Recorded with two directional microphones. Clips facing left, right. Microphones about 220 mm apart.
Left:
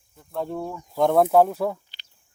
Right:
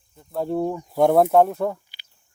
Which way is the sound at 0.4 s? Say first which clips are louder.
Right 7 dB; 15° right (ahead or behind).